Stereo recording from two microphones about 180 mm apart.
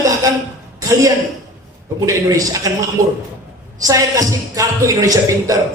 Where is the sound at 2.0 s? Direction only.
20° right (ahead or behind).